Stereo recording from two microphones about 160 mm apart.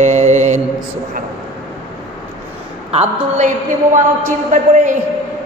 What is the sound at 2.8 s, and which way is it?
A man's voice, 40° right (ahead or behind).